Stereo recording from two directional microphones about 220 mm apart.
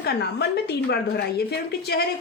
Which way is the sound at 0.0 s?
45° left (ahead or behind).